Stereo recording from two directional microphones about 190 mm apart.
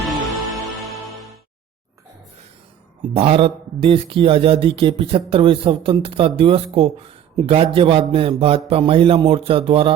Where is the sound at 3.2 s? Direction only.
30° right (ahead or behind).